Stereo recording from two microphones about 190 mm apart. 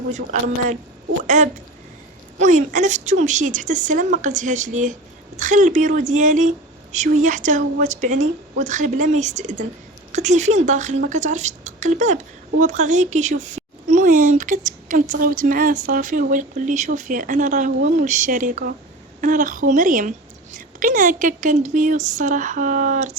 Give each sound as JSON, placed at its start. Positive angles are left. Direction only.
{"t": 1.4, "sound": "a woman's voice", "side_deg": -40}